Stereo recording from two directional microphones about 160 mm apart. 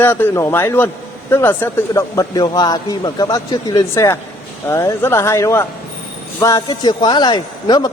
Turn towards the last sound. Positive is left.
turn(degrees=25)  # may be behind; listen again after turning